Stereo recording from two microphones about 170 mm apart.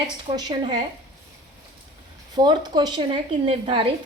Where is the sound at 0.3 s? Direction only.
25° right (ahead or behind).